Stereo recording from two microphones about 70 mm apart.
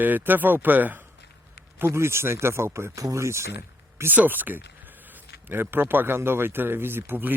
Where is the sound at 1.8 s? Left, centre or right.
Right.